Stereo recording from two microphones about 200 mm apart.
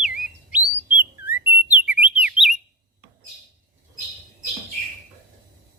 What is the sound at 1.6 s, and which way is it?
Bird, 10° right (ahead or behind).